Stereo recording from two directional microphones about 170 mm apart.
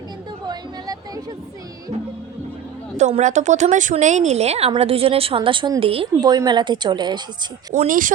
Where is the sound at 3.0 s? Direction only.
45° right (ahead or behind); by 7.2 s 25° right (ahead or behind).